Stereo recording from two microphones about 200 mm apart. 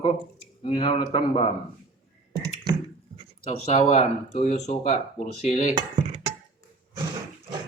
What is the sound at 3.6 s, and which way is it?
Speech, 30° left (ahead or behind).